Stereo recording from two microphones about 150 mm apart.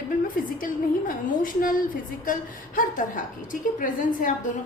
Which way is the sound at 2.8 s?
65° left (ahead or behind).